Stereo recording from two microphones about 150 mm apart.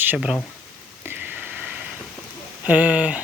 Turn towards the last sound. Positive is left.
turn(degrees=-10)  # may be behind; listen again after turning